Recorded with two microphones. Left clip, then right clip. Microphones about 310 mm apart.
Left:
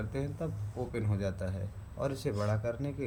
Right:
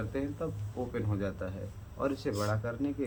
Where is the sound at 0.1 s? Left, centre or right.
Left.